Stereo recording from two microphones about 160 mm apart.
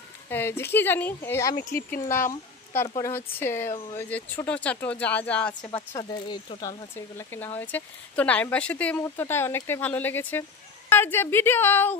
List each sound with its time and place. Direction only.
0.3 s speech: 15° left (ahead or behind)
1.7 s speech: 65° left (ahead or behind)
3.0 s speech: 15° left (ahead or behind)
5.9 s speech: 30° left (ahead or behind); by 12.0 s 10° left (ahead or behind)